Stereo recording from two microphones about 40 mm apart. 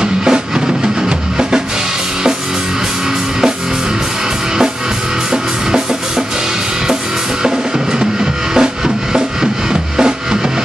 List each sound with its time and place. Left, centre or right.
0.0 s music: right
5.3 s music: centre
8.0 s music: centre